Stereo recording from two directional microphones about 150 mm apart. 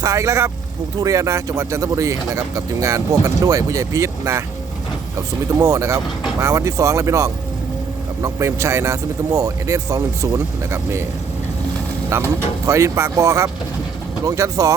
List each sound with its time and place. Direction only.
0.0 s speech: 20° right (ahead or behind)
5.5 s speech: 20° right (ahead or behind)
12.1 s speech: 20° right (ahead or behind)